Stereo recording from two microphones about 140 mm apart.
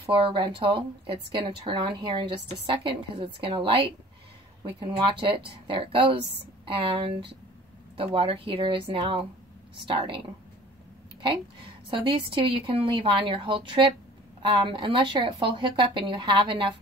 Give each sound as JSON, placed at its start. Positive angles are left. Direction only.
{"t": 0.1, "sound": "a woman's voice", "side_deg": -40}
{"t": 11.2, "sound": "a woman's voice", "side_deg": -35}